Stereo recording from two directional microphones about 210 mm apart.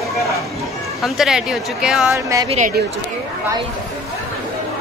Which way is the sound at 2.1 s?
15° right (ahead or behind).